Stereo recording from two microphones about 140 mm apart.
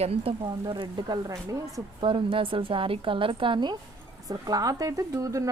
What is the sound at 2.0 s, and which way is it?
A woman's voice, 35° right (ahead or behind).